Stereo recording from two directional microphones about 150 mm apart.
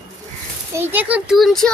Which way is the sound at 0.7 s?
15° right (ahead or behind).